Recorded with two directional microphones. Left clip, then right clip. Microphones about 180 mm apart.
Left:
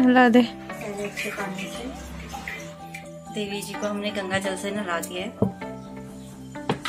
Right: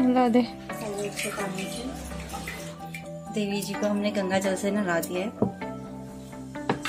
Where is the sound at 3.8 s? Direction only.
45° right (ahead or behind).